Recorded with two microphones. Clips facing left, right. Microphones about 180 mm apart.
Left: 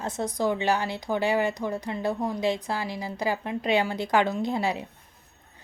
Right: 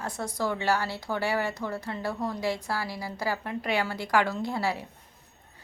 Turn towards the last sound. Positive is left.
turn(degrees=20)  # may be behind; listen again after turning